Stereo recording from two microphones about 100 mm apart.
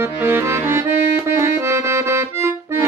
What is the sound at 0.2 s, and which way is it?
Accordion, 25° right (ahead or behind).